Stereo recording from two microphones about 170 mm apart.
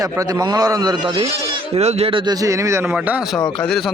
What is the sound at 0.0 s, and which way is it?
Speech, 20° right (ahead or behind).